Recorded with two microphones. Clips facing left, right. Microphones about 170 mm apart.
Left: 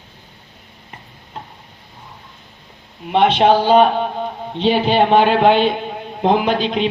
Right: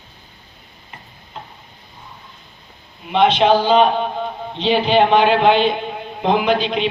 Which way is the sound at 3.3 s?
50° left (ahead or behind).